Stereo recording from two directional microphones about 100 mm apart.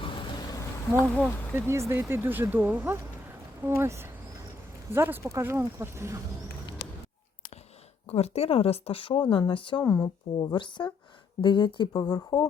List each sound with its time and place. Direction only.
0.0 s bee: 55° left (ahead or behind)
0.4 s insect: 35° left (ahead or behind)
1.1 s speech: 10° left (ahead or behind)
1.7 s speech: 25° right (ahead or behind)
8.0 s speech: 90° left; by 9.8 s 60° left (ahead or behind)
9.8 s speech: 30° left (ahead or behind)
10.3 s speech: 55° left (ahead or behind)